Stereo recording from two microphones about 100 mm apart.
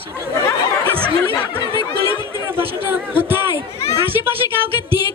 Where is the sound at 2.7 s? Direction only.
20° right (ahead or behind).